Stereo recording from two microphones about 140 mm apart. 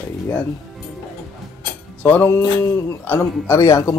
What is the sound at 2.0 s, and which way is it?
Music, 15° left (ahead or behind).